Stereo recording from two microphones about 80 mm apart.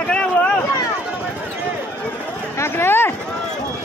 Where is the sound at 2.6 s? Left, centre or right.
Left.